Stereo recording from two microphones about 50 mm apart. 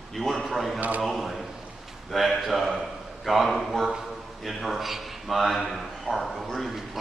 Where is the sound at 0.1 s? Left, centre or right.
Centre.